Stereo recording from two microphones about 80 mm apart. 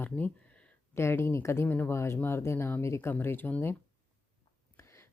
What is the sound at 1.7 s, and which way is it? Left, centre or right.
Speech, left.